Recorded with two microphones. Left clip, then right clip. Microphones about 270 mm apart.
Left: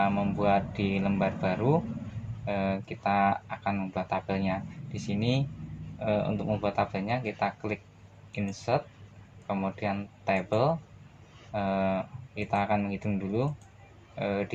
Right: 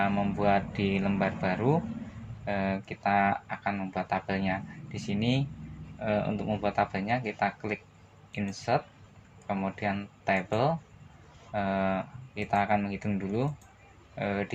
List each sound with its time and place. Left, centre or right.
0.0 s speech: right